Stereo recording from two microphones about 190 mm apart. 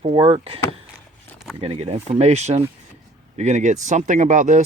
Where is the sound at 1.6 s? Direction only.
30° right (ahead or behind).